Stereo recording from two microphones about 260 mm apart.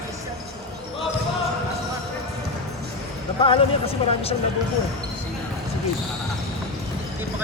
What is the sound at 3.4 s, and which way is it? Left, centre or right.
Speech, left.